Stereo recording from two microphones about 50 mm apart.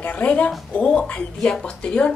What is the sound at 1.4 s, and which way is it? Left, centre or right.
Speech, centre.